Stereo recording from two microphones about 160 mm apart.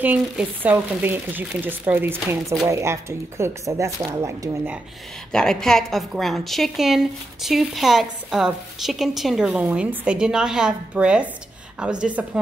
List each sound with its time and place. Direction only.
0.0 s speech: 10° right (ahead or behind)
5.3 s a woman's voice: 5° left (ahead or behind)